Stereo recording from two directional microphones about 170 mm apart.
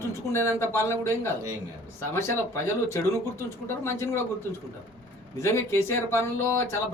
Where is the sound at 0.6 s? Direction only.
15° left (ahead or behind).